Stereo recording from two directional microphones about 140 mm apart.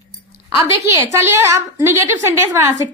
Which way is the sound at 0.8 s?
15° right (ahead or behind).